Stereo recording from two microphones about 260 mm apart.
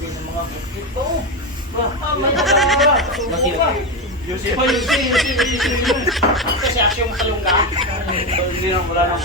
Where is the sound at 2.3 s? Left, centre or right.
Centre.